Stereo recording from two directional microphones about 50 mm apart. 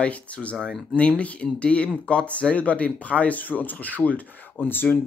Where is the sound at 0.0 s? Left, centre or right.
Left.